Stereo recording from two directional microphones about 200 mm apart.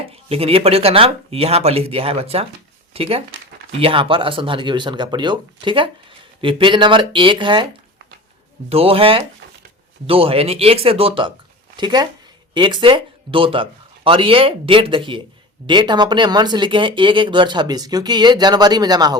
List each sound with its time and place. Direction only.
0.1 s speech: 30° right (ahead or behind)
8.7 s speech: 30° right (ahead or behind)